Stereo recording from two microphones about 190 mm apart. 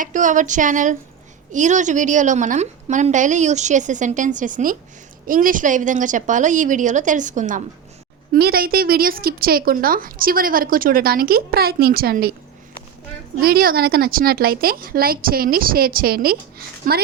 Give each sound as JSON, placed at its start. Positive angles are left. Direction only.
{"t": 0.0, "sound": "a woman's voice", "side_deg": -40}
{"t": 8.3, "sound": "a woman's voice", "side_deg": -55}
{"t": 13.4, "sound": "a woman's voice", "side_deg": -50}